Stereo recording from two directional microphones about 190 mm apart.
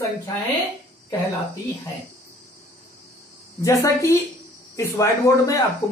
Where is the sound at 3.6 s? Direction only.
15° left (ahead or behind).